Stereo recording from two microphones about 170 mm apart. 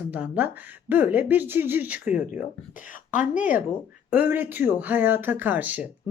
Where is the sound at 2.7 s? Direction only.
50° left (ahead or behind).